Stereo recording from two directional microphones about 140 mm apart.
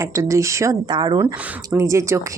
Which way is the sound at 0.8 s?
30° right (ahead or behind).